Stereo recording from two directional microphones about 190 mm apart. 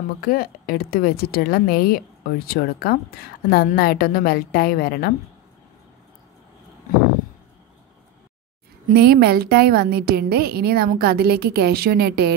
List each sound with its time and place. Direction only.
0.2 s a woman's voice: 50° left (ahead or behind)
8.9 s a woman's voice: 55° right (ahead or behind)